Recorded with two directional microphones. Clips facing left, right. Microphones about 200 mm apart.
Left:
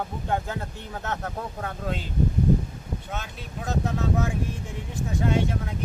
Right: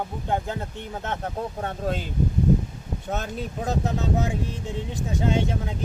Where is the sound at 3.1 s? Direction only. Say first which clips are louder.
Right 7 dB; 35° right (ahead or behind).